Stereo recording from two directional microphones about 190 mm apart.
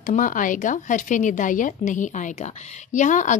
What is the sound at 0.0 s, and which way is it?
Speech, 45° left (ahead or behind).